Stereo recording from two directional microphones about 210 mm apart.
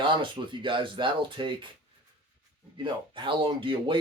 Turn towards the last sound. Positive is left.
turn(degrees=-25)  # may be behind; listen again after turning